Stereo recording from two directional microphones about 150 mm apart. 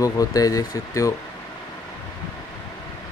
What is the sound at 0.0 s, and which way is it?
Speech, 25° left (ahead or behind).